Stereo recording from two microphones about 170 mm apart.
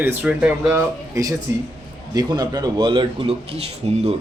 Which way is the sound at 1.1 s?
20° right (ahead or behind).